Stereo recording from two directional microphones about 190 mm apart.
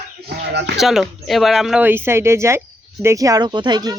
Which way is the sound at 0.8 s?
Centre (ahead or behind).